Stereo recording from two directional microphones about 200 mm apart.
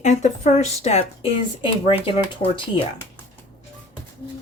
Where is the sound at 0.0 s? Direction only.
35° left (ahead or behind).